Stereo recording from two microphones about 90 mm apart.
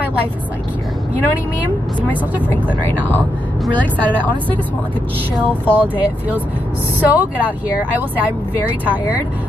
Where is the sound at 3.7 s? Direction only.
15° left (ahead or behind).